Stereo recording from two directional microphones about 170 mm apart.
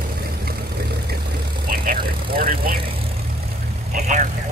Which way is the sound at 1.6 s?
60° right (ahead or behind).